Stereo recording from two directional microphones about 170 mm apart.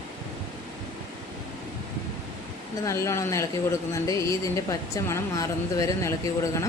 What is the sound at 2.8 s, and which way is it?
A woman's voice, 20° left (ahead or behind).